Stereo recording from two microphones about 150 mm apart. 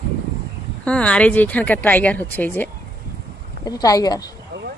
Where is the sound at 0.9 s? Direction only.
5° left (ahead or behind).